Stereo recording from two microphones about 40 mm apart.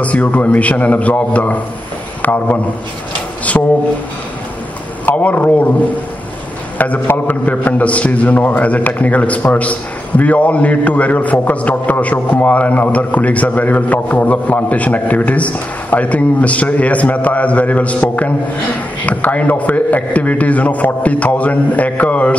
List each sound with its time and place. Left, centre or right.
0.0 s a man's voice: left
2.2 s a man's voice: left
3.5 s a man's voice: left
5.0 s a man's voice: left
6.8 s a man's voice: left